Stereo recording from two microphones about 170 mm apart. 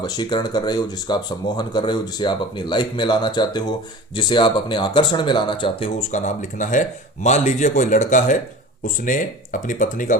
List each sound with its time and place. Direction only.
0.0 s speech: 25° left (ahead or behind); by 10.2 s 50° left (ahead or behind)